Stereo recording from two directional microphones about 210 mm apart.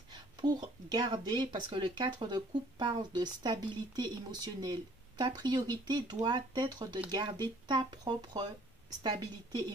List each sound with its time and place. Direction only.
0.1 s speech: 20° right (ahead or behind)